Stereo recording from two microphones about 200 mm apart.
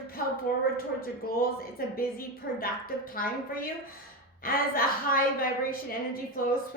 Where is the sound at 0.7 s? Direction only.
45° left (ahead or behind).